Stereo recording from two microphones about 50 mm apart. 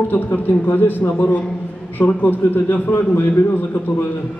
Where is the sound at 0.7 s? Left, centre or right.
Left.